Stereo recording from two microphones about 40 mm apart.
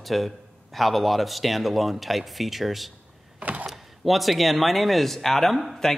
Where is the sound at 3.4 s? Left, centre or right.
Right.